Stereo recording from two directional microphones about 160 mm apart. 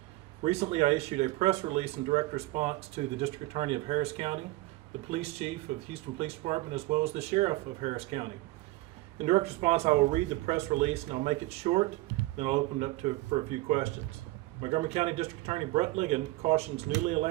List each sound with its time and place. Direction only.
0.4 s speech: 40° right (ahead or behind)
5.9 s speech: 40° right (ahead or behind)